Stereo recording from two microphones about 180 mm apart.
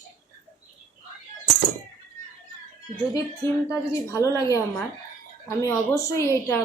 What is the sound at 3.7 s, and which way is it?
A woman's voice, 15° left (ahead or behind).